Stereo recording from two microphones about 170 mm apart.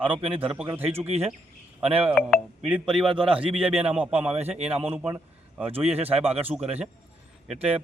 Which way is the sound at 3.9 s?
5° right (ahead or behind).